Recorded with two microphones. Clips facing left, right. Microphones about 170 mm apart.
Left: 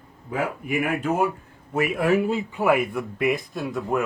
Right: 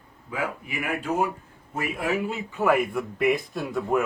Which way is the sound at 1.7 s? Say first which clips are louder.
Left 7 dB; 70° left (ahead or behind).